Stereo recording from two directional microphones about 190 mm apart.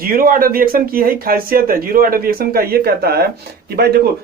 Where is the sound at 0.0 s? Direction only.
50° right (ahead or behind).